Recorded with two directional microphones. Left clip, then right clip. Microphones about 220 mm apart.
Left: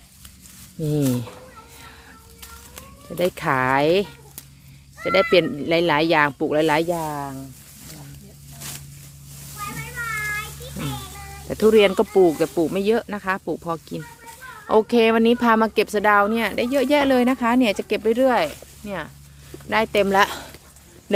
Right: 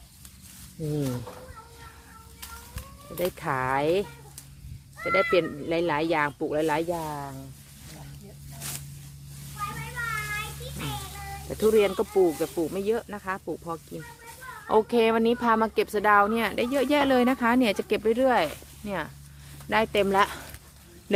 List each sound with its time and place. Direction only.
0.9 s speech: 45° left (ahead or behind)
3.3 s speech: 45° left (ahead or behind)
9.6 s children playing: 45° left (ahead or behind)
11.4 s speech: 35° left (ahead or behind)
14.7 s speech: 25° left (ahead or behind); by 18.0 s 5° left (ahead or behind)
18.0 s speech: 15° left (ahead or behind)
18.9 s speech: centre (ahead or behind)
19.7 s speech: 15° left (ahead or behind)